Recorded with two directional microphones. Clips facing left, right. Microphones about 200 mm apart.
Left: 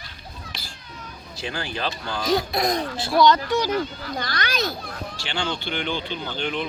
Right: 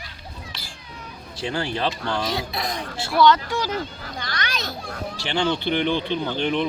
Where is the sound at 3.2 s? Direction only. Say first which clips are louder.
Right 1 dB; 15° left (ahead or behind).